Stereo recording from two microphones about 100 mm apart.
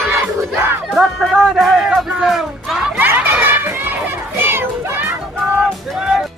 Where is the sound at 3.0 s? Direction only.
20° right (ahead or behind).